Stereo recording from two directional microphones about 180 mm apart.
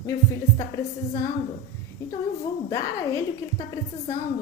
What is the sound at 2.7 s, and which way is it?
Speech, 15° left (ahead or behind).